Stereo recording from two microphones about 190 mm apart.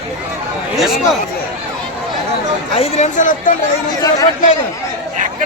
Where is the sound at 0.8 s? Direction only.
Centre (ahead or behind).